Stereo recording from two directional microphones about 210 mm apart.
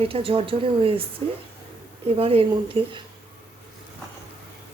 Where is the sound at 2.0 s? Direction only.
25° right (ahead or behind).